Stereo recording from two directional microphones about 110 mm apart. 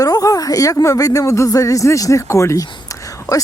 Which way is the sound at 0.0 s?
30° left (ahead or behind).